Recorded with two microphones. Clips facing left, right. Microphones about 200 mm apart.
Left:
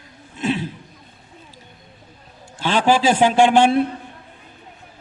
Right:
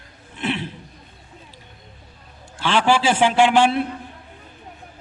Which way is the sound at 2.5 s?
45° left (ahead or behind).